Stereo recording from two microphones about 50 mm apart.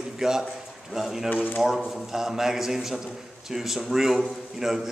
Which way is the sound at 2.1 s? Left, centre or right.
Centre.